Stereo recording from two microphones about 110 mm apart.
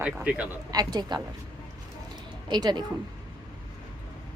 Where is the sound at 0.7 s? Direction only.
35° right (ahead or behind).